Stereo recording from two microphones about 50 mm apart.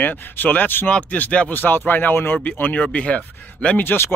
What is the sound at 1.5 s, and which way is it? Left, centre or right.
Speech, left.